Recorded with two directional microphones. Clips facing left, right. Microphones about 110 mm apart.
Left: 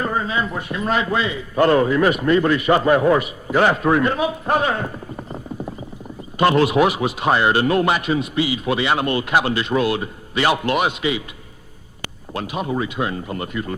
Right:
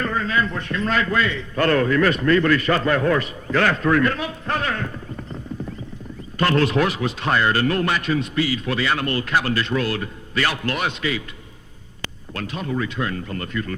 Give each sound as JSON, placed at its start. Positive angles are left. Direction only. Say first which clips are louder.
{"t": 0.0, "sound": "a man's voice", "louder": "even", "side_deg": 15}
{"t": 6.4, "sound": "a man's voice", "louder": "left 4 dB", "side_deg": 15}
{"t": 12.3, "sound": "a man's voice", "louder": "left 3 dB", "side_deg": 15}